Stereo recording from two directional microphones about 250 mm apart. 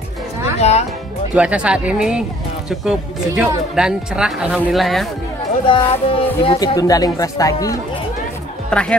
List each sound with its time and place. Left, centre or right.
0.6 s speech: left
1.3 s speech: centre
5.7 s speech: left; by 8.9 s centre